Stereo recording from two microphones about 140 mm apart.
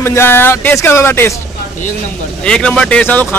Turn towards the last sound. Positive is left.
turn(degrees=10)  # may be behind; listen again after turning